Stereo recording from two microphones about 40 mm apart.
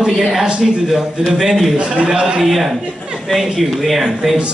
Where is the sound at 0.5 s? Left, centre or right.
Centre.